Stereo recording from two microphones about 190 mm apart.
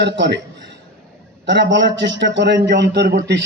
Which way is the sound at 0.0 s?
65° right (ahead or behind).